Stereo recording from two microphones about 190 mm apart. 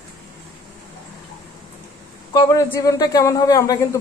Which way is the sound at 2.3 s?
20° left (ahead or behind).